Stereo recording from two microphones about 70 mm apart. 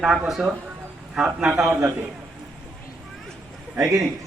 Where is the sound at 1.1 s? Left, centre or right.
Centre.